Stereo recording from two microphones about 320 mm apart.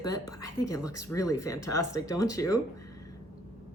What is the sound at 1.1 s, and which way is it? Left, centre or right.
Speech, centre.